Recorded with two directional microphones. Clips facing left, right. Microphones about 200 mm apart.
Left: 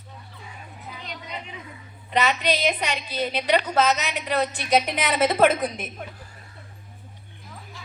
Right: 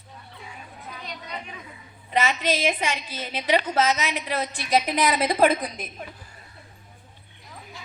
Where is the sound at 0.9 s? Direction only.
20° left (ahead or behind).